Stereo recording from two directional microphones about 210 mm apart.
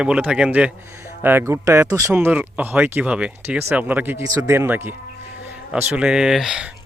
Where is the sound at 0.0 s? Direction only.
5° right (ahead or behind).